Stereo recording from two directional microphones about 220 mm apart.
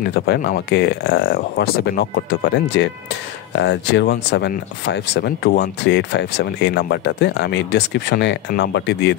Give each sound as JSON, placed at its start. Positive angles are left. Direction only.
{"t": 0.1, "sound": "speech", "side_deg": 50}